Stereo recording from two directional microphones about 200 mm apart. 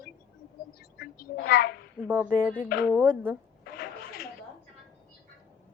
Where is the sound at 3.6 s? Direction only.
50° left (ahead or behind).